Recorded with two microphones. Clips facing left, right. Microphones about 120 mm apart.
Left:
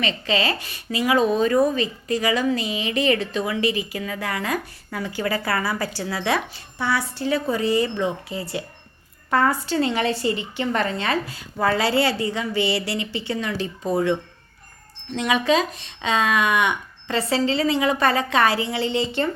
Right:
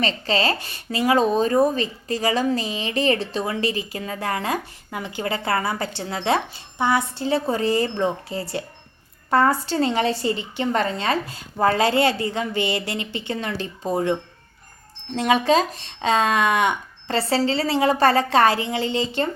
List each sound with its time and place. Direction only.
0.0 s speech: 35° right (ahead or behind)
4.9 s speech: 20° right (ahead or behind); by 18.6 s 40° right (ahead or behind)